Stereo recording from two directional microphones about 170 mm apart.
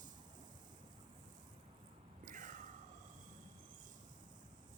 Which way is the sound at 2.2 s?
50° right (ahead or behind).